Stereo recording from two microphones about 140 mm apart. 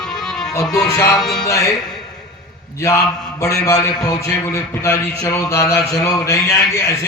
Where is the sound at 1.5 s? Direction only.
20° left (ahead or behind).